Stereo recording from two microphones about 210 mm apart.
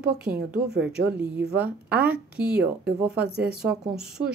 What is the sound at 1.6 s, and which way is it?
A woman's voice, 5° right (ahead or behind).